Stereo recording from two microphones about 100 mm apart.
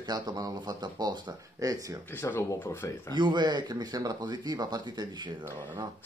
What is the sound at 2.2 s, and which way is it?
Speech, 25° left (ahead or behind).